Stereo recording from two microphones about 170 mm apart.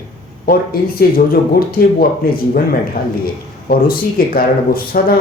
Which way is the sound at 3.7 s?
60° left (ahead or behind).